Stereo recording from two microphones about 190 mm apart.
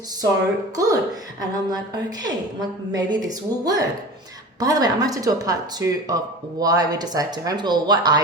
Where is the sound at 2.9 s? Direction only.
20° right (ahead or behind).